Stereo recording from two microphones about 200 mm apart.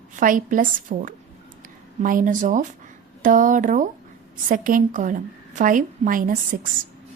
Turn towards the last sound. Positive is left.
turn(degrees=-45)  # may be behind; listen again after turning